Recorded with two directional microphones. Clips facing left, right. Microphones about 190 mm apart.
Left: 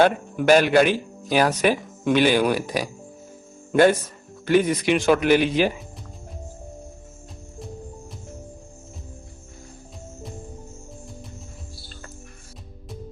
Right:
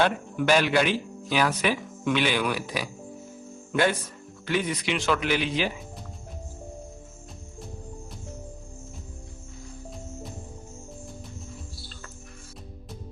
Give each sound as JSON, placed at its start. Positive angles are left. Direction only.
{"t": 0.0, "sound": "speech", "side_deg": 45}